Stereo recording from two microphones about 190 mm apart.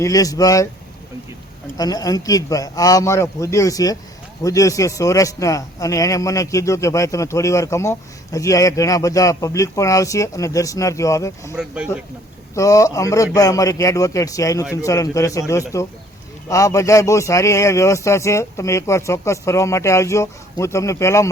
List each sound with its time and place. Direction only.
0.0 s a man's voice: 20° left (ahead or behind)
1.8 s a man's voice: 20° left (ahead or behind)
11.5 s speech: 5° right (ahead or behind)
12.5 s a man's voice: 15° left (ahead or behind)